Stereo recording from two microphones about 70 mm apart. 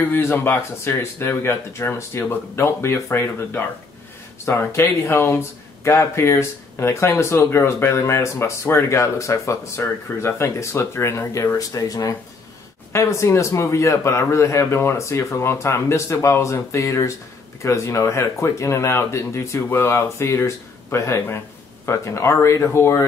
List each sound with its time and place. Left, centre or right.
0.1 s speech: left
12.9 s speech: left